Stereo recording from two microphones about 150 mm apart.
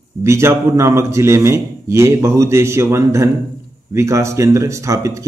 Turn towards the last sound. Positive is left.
turn(degrees=-20)  # may be behind; listen again after turning